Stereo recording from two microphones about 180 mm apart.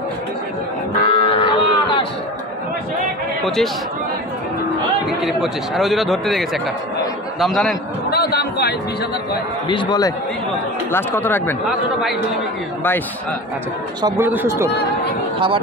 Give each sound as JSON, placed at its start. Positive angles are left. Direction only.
{"t": 1.0, "sound": "cattle", "side_deg": 30}
{"t": 3.4, "sound": "speech", "side_deg": 0}
{"t": 5.2, "sound": "speech", "side_deg": 0}
{"t": 8.1, "sound": "a man's voice", "side_deg": 60}
{"t": 9.7, "sound": "speech", "side_deg": 25}
{"t": 14.0, "sound": "speech", "side_deg": -15}
{"t": 15.3, "sound": "speech", "side_deg": -30}